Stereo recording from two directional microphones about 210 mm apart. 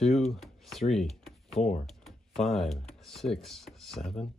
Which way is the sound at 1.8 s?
Centre (ahead or behind).